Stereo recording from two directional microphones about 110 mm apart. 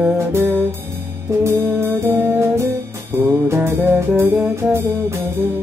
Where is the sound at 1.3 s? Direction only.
25° right (ahead or behind).